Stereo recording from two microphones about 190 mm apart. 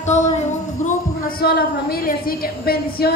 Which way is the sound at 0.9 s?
50° left (ahead or behind).